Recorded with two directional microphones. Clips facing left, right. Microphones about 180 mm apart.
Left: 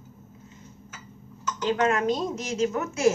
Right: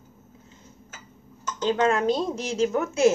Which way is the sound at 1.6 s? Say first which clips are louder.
Right 2 dB; 30° right (ahead or behind).